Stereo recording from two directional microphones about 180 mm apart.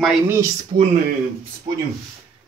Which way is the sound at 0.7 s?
45° right (ahead or behind).